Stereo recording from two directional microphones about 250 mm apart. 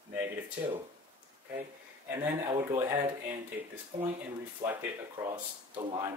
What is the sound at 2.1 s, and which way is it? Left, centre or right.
Speech, centre.